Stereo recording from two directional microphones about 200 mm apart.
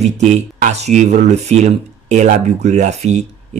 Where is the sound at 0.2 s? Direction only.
35° right (ahead or behind).